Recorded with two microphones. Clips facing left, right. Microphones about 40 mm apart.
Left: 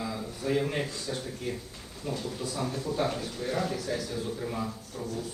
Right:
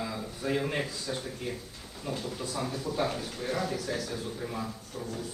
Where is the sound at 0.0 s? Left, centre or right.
Centre.